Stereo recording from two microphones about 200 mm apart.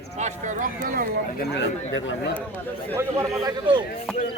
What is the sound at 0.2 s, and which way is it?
Speech, 40° right (ahead or behind).